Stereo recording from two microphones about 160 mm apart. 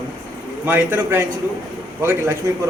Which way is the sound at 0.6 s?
15° right (ahead or behind).